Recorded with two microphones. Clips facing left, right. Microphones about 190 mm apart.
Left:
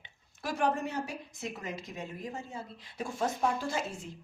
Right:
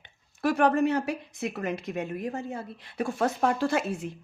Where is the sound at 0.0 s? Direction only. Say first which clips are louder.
Right 12 dB; 65° right (ahead or behind).